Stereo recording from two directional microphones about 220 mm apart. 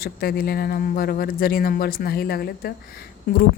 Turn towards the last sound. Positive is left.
turn(degrees=45)  # may be behind; listen again after turning